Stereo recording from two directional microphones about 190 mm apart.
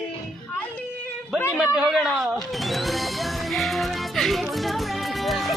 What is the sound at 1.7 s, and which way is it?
Music, 5° right (ahead or behind).